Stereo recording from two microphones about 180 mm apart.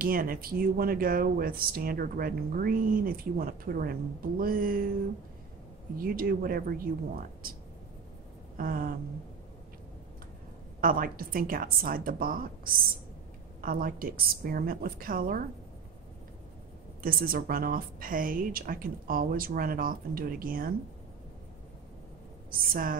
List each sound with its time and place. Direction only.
0.0 s speech: 55° right (ahead or behind)
5.9 s speech: 55° right (ahead or behind)
8.5 s speech: 50° right (ahead or behind)
10.8 s speech: 50° right (ahead or behind)
17.0 s speech: 55° right (ahead or behind)
22.5 s speech: 55° right (ahead or behind)